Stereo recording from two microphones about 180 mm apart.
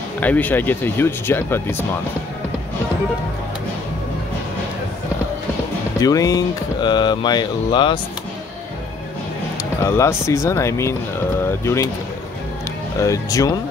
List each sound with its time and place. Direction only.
0.2 s speech: 10° left (ahead or behind)
5.9 s speech: 20° left (ahead or behind)
9.8 s speech: 15° left (ahead or behind)
13.0 s speech: 20° left (ahead or behind)